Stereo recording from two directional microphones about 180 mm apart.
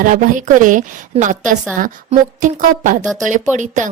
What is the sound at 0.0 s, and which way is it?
A woman's voice, 45° right (ahead or behind).